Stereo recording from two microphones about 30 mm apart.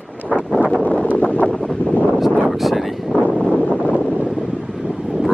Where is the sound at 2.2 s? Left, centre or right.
Centre.